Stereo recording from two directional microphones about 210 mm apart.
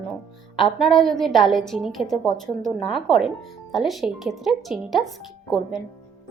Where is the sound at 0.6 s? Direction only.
Centre (ahead or behind).